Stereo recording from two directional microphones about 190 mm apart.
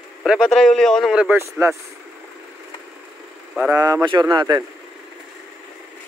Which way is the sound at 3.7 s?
20° right (ahead or behind).